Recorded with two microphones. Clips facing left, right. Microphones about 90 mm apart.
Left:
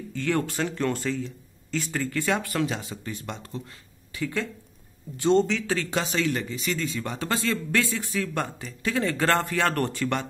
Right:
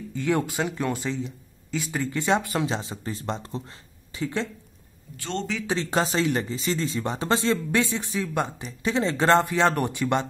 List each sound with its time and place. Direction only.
0.1 s speech: 15° right (ahead or behind)
5.1 s a man's voice: 20° left (ahead or behind)
5.6 s speech: 20° right (ahead or behind)
5.9 s speech: 35° right (ahead or behind); by 10.2 s 15° right (ahead or behind)